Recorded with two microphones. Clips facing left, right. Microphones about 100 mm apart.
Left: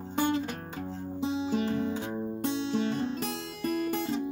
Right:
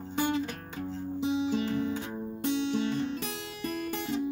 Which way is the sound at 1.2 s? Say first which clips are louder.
Even; 40° left (ahead or behind).